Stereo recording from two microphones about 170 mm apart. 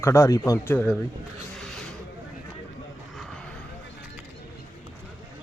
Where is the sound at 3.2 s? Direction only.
5° left (ahead or behind).